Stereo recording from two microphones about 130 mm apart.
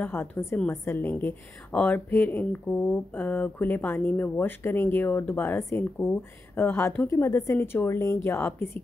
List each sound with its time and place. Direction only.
0.0 s a woman's voice: 15° left (ahead or behind)